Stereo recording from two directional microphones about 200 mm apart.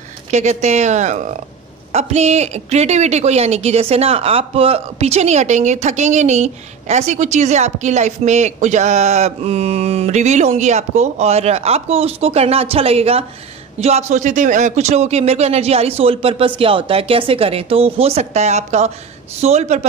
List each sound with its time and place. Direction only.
0.3 s a woman's voice: 35° right (ahead or behind)